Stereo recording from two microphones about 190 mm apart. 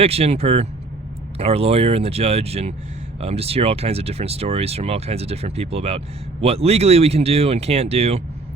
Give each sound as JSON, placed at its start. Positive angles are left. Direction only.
{"t": 0.0, "sound": "speech", "side_deg": -30}